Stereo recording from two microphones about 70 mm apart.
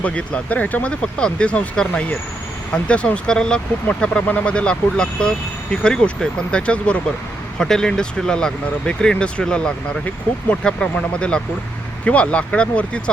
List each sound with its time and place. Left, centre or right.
0.0 s speech: centre